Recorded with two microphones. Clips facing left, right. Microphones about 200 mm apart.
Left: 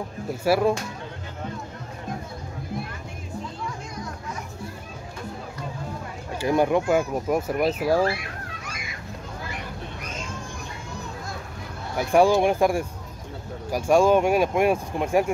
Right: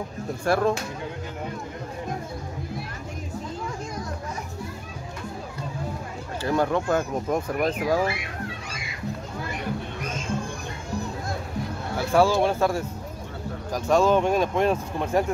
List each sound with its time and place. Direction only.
0.5 s speech: 10° left (ahead or behind)
6.4 s speech: 15° left (ahead or behind)
12.0 s speech: 15° left (ahead or behind)